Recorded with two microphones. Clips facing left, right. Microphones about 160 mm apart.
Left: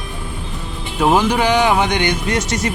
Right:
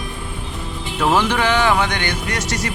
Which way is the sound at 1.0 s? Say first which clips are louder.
Left 3 dB; 15° left (ahead or behind).